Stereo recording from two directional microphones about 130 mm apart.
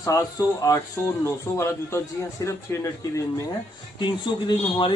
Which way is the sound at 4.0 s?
35° left (ahead or behind).